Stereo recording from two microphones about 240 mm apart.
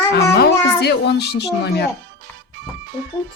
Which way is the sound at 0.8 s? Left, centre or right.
Left.